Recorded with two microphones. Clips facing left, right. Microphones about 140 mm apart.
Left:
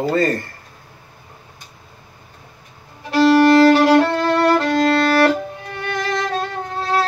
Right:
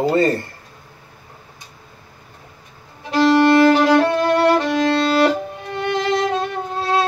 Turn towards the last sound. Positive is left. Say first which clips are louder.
# right 1 dB
turn(degrees=-15)  # may be behind; listen again after turning